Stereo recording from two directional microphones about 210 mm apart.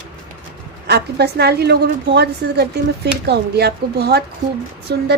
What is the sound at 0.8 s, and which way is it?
A woman's voice, 50° right (ahead or behind).